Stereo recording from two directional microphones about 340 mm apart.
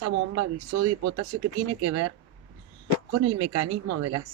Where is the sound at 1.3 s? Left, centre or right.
Right.